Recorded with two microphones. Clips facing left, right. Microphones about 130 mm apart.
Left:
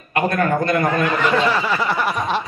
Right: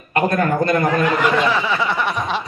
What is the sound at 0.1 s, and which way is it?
Speech, 30° right (ahead or behind).